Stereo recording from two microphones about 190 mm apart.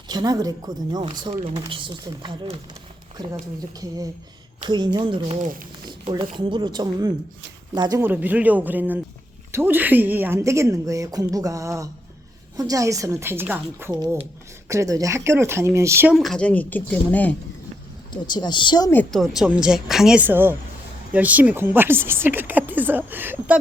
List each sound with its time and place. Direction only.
0.1 s speech: 20° right (ahead or behind)
3.8 s speech: 20° right (ahead or behind)
5.4 s speech: 45° right (ahead or behind)
6.3 s speech: 25° right (ahead or behind)
16.1 s speech: centre (ahead or behind)
18.1 s speech: 20° left (ahead or behind)
18.9 s speech: 5° left (ahead or behind); by 23.6 s 10° right (ahead or behind)